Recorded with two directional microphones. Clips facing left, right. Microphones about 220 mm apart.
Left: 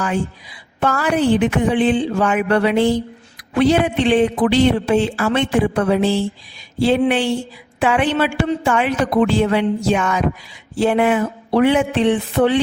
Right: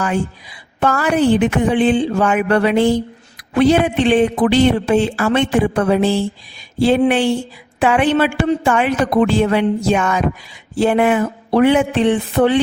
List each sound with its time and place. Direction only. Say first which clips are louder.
0.8 s speech: right 2 dB; 50° right (ahead or behind)